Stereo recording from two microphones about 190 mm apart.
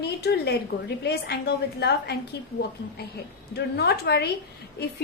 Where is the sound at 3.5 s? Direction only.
60° left (ahead or behind).